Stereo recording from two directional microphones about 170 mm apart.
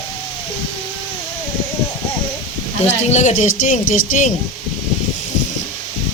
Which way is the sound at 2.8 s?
40° left (ahead or behind).